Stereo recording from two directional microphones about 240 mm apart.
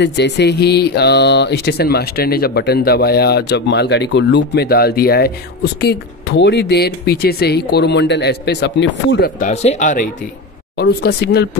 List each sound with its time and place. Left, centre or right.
0.0 s speech: left
9.4 s speech: left
10.8 s speech: left